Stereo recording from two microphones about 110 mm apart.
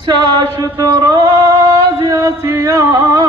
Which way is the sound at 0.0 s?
45° right (ahead or behind).